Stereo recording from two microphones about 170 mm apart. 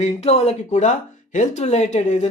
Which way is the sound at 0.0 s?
40° left (ahead or behind).